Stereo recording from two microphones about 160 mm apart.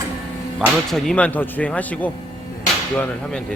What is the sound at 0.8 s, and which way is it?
Speech, 5° left (ahead or behind).